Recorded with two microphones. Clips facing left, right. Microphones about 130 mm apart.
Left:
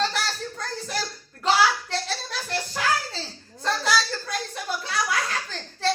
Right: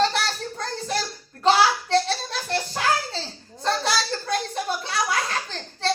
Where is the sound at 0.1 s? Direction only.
30° right (ahead or behind).